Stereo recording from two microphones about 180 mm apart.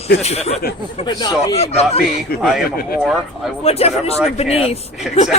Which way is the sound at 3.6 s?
35° left (ahead or behind).